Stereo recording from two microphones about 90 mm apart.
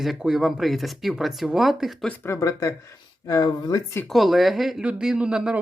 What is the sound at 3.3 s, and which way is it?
Speech, 50° left (ahead or behind).